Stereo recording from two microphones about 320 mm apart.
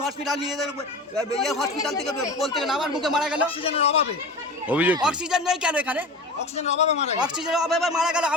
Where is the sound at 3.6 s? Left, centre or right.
Centre.